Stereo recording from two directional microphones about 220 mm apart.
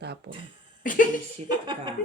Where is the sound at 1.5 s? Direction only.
20° right (ahead or behind).